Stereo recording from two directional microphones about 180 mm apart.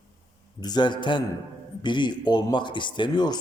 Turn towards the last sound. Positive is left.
turn(degrees=25)  # may be behind; listen again after turning